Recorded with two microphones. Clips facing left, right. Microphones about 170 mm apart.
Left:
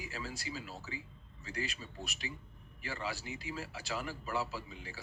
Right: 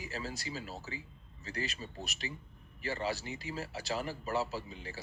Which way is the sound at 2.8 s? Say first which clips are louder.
Right 5 dB; 35° right (ahead or behind).